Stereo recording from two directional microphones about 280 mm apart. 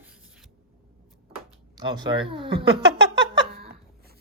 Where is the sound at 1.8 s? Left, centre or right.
Centre.